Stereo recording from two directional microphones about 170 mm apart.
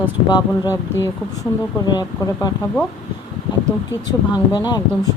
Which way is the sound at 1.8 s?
25° left (ahead or behind).